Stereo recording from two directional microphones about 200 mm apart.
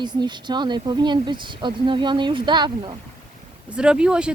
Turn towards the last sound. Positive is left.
turn(degrees=-5)  # may be behind; listen again after turning